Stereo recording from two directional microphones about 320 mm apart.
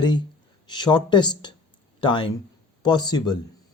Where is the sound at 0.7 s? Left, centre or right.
Centre.